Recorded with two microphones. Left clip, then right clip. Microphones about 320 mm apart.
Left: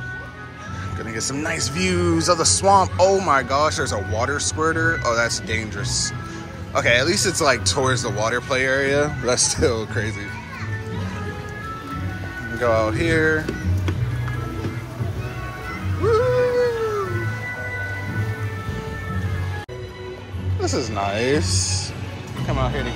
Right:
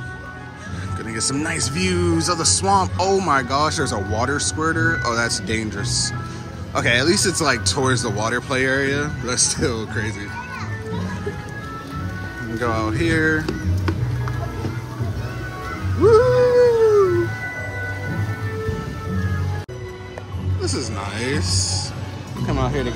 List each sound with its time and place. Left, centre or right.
1.1 s speech: centre
12.5 s speech: centre
16.1 s music: centre
20.6 s speech: centre
22.5 s speech: centre